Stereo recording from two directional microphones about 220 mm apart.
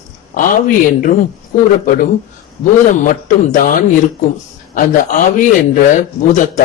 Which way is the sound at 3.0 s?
35° left (ahead or behind).